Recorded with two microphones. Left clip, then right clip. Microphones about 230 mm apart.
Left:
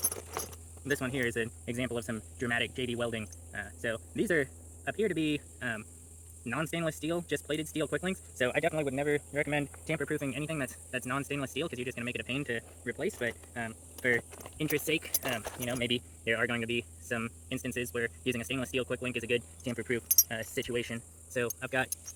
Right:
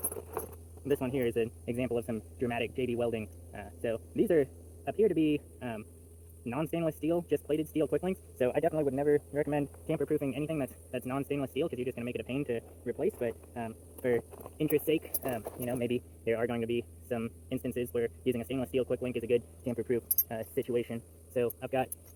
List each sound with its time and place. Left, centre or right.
0.0 s keys jangling: left
0.5 s a man's voice: left